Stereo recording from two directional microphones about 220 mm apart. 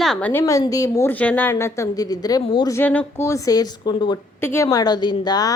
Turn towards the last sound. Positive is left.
turn(degrees=20)  # may be behind; listen again after turning